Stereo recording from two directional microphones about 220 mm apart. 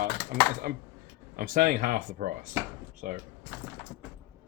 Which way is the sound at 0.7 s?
45° right (ahead or behind).